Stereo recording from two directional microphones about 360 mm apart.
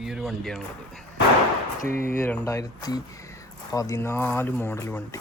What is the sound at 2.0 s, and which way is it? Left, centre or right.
Speech, centre.